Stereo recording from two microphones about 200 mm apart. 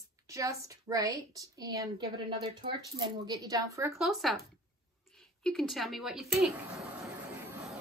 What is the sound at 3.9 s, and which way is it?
Speech, centre (ahead or behind).